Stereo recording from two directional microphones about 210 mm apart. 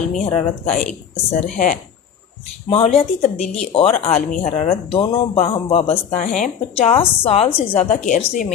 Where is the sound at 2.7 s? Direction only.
25° left (ahead or behind).